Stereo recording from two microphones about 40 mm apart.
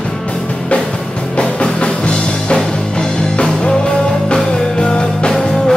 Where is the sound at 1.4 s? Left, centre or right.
Left.